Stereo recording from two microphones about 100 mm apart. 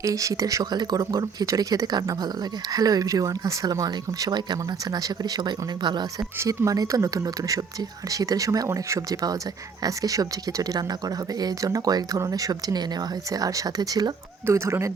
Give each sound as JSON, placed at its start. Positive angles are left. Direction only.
{"t": 0.0, "sound": "speech", "side_deg": -35}
{"t": 6.4, "sound": "speech", "side_deg": -30}
{"t": 14.4, "sound": "speech", "side_deg": -25}